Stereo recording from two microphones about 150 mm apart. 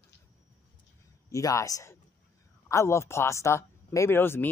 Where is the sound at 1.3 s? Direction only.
20° left (ahead or behind).